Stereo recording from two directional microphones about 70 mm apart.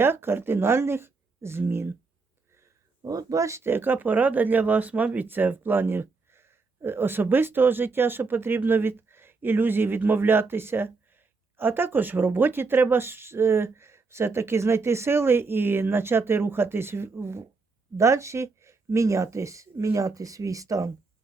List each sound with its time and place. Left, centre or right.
0.0 s speech: right
3.0 s speech: right